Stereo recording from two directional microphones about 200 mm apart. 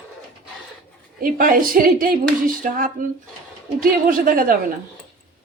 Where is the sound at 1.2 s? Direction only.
45° right (ahead or behind).